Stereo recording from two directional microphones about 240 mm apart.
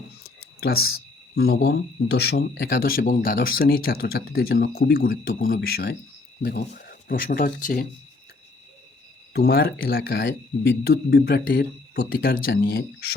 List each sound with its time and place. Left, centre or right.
0.6 s speech: left
9.3 s speech: left